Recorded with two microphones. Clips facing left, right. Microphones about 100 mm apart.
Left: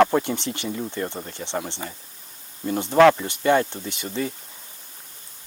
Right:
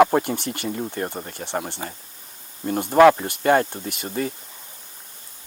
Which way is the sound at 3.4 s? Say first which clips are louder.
Right 1 dB; 45° right (ahead or behind).